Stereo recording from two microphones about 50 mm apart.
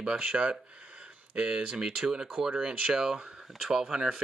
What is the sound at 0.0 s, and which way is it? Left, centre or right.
Speech, centre.